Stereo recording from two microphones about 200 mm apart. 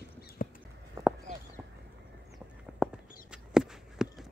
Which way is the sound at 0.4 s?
45° left (ahead or behind).